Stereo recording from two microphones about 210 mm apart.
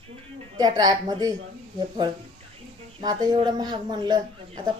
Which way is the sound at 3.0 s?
20° right (ahead or behind).